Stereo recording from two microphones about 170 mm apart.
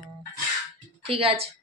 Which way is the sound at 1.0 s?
35° right (ahead or behind).